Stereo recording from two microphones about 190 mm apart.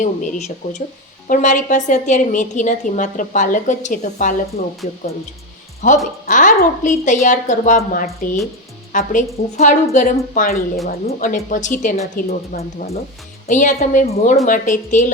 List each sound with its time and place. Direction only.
0.0 s a woman's voice: 40° left (ahead or behind)